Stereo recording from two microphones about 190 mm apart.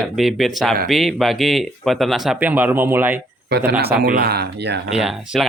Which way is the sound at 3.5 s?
65° right (ahead or behind).